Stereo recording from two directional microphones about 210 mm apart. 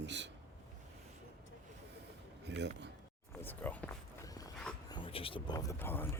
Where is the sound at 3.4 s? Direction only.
10° left (ahead or behind).